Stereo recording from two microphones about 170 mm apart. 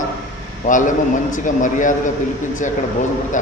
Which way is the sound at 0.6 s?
50° left (ahead or behind).